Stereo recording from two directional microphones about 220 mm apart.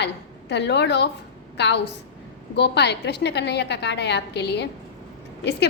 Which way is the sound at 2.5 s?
50° left (ahead or behind).